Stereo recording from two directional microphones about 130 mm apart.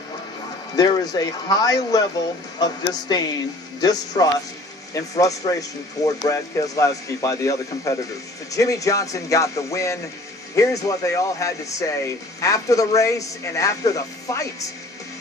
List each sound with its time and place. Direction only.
0.7 s speech: 30° left (ahead or behind)